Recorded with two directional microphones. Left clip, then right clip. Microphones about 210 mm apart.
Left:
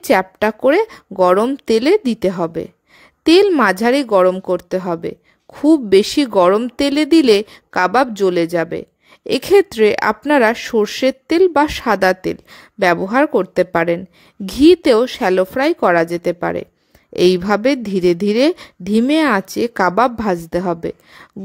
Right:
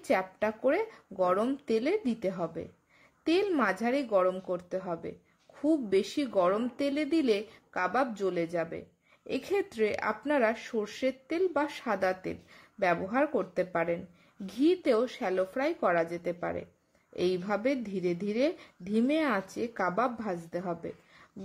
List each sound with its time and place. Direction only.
0.0 s speech: 50° left (ahead or behind)